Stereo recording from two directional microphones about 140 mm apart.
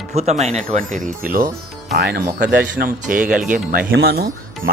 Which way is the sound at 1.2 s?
80° right.